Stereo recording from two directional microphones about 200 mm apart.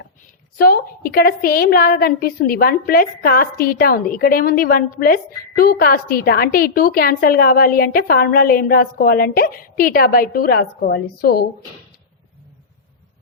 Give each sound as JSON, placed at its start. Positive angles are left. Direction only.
{"t": 0.5, "sound": "a woman's voice", "side_deg": 50}